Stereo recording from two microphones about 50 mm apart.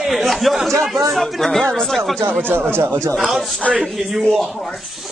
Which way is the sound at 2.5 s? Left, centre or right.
Right.